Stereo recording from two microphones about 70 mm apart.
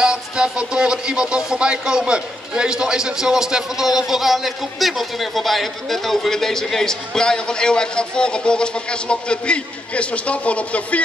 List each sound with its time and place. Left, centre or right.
0.0 s a man's voice: centre